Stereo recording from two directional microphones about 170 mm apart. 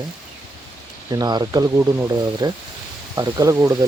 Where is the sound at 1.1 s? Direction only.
25° right (ahead or behind).